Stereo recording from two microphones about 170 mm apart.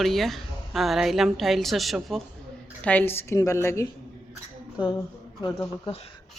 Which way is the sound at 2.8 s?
10° left (ahead or behind).